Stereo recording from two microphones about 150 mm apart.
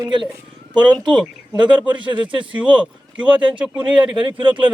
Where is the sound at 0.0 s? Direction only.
30° right (ahead or behind).